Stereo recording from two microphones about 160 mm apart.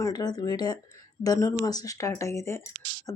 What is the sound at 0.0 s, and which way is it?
Speech, 25° left (ahead or behind).